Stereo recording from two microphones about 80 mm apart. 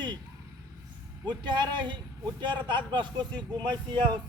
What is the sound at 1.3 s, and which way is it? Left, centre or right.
Speech, right.